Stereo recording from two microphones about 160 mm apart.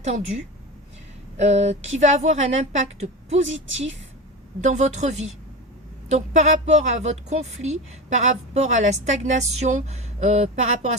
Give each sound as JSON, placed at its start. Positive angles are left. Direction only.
{"t": 0.0, "sound": "speech", "side_deg": -45}
{"t": 1.4, "sound": "speech", "side_deg": -45}
{"t": 4.6, "sound": "speech", "side_deg": -45}